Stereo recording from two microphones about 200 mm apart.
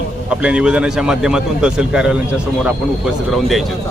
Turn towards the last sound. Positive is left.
turn(degrees=0)  # may be behind; listen again after turning